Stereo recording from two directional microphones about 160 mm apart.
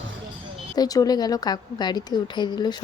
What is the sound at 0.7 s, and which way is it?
A woman's voice, 25° left (ahead or behind).